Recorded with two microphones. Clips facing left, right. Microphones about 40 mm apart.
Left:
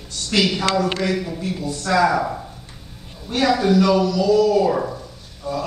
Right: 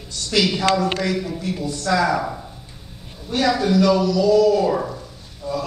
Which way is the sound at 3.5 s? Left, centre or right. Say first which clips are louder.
Left 2 dB; centre.